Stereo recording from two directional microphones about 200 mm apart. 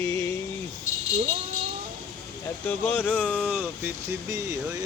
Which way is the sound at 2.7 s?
10° left (ahead or behind).